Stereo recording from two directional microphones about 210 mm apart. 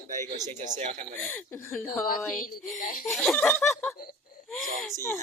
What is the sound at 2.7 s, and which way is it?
Speech, 40° left (ahead or behind).